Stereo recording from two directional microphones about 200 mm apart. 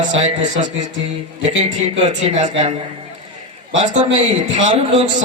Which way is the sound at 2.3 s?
35° right (ahead or behind).